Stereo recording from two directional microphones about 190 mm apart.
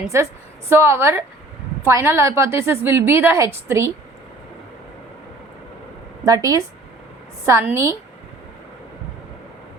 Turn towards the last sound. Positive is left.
turn(degrees=-15)  # may be behind; listen again after turning